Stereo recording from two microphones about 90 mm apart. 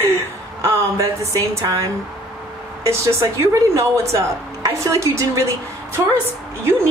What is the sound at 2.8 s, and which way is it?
A woman's voice, 30° right (ahead or behind).